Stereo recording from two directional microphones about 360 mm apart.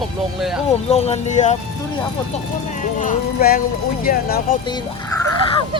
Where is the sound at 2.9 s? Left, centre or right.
Left.